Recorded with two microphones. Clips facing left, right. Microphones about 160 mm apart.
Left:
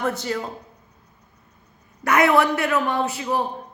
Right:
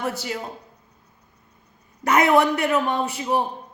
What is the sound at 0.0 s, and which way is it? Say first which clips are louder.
Speech: left 3 dB; 5° right (ahead or behind).